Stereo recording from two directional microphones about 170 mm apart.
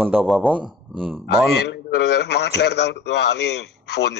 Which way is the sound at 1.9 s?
80° left.